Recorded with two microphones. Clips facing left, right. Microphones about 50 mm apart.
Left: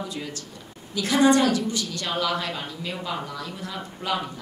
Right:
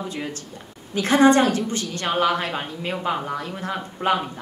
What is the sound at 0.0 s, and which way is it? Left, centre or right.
Speech, right.